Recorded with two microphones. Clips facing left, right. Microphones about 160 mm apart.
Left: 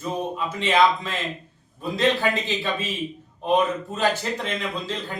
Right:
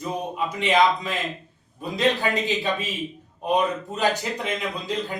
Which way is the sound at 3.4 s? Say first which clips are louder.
Left 1 dB; 15° right (ahead or behind).